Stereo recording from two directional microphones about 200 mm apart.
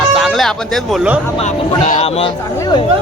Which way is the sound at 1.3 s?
30° left (ahead or behind).